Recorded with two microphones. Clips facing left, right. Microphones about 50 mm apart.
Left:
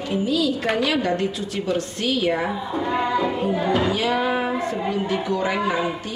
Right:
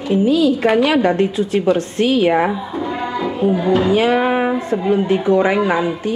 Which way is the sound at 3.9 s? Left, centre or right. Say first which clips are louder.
Right 7 dB; right.